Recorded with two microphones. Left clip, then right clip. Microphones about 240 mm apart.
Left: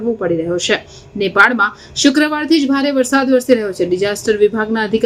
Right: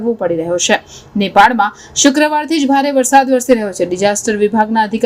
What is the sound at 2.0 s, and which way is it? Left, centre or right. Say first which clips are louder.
Speech: right 1 dB; centre.